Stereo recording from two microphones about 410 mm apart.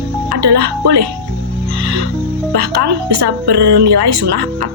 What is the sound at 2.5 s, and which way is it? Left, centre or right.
Speech, right.